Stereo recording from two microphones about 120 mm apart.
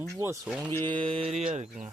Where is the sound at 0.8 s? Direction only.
45° right (ahead or behind).